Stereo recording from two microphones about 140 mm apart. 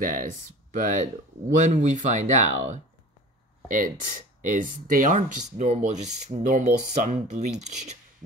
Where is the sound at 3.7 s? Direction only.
70° right (ahead or behind); by 8.0 s 55° right (ahead or behind).